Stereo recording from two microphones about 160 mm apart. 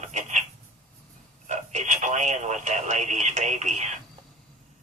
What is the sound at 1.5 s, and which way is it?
Speech, 45° right (ahead or behind).